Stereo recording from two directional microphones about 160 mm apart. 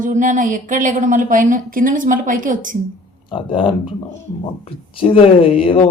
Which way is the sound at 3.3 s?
30° left (ahead or behind).